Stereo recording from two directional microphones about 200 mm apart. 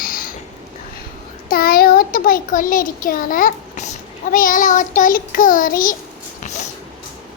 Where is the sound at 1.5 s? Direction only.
50° left (ahead or behind).